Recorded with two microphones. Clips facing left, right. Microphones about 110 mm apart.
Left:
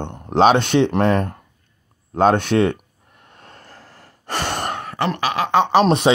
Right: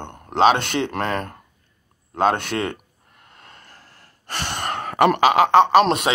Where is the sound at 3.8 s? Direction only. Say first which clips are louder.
Left 6 dB; 90° left.